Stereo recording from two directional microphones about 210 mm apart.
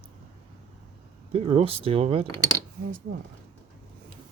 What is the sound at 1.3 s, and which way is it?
Speech, 30° right (ahead or behind).